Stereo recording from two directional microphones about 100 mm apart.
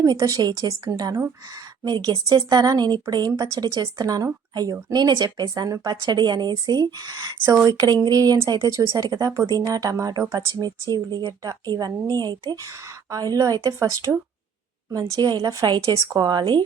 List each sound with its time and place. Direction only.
0.0 s a woman's voice: 35° right (ahead or behind)